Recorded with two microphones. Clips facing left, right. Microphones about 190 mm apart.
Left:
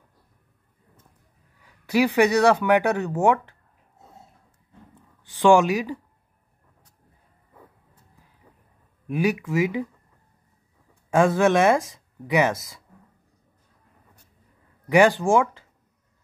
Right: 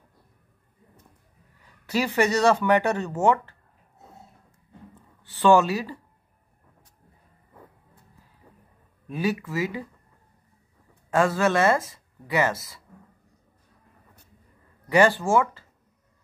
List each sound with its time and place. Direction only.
1.9 s speech: 15° left (ahead or behind)
5.2 s speech: 15° left (ahead or behind)
9.0 s speech: 15° left (ahead or behind)
11.1 s speech: 15° left (ahead or behind)
14.9 s speech: 15° left (ahead or behind)